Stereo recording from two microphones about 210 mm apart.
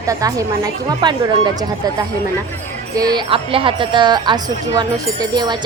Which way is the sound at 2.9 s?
20° right (ahead or behind).